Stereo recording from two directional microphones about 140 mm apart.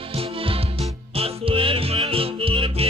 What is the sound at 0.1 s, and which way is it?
Music, 40° right (ahead or behind).